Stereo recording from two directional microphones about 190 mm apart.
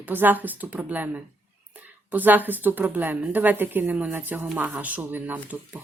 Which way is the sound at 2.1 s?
10° right (ahead or behind).